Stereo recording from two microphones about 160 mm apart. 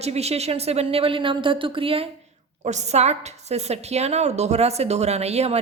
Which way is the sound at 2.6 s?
45° right (ahead or behind).